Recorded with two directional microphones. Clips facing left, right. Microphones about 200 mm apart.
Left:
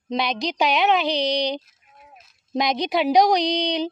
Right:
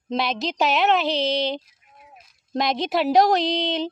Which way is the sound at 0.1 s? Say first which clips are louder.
Even; 5° right (ahead or behind).